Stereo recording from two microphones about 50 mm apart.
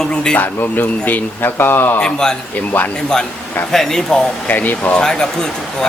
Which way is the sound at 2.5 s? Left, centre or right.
Left.